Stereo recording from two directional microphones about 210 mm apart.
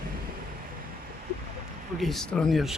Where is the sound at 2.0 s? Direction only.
Centre (ahead or behind).